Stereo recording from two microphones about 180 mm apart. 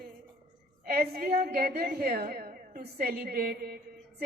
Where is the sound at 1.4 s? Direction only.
55° right (ahead or behind).